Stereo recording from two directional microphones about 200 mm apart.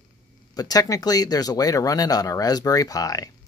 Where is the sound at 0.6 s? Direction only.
20° left (ahead or behind).